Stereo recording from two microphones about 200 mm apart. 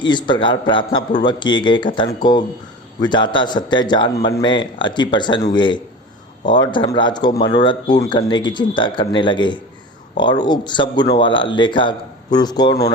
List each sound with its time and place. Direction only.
0.0 s a man's voice: 20° left (ahead or behind)